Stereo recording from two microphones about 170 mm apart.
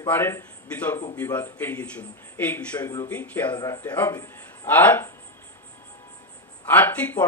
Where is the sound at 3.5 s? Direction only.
20° left (ahead or behind).